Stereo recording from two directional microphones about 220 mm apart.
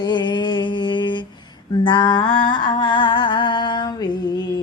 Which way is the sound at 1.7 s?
20° left (ahead or behind).